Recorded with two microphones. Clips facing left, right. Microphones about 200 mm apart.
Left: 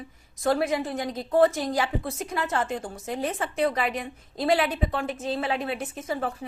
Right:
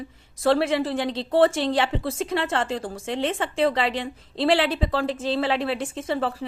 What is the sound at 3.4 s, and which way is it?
A woman's voice, 30° right (ahead or behind).